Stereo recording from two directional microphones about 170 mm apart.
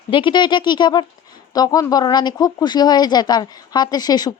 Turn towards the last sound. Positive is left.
turn(degrees=25)  # may be behind; listen again after turning